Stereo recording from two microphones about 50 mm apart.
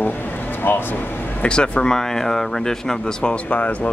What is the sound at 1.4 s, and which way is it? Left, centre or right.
Speech, left.